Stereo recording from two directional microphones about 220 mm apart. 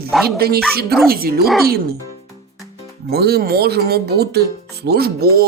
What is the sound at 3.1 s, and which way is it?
Speech, 45° right (ahead or behind).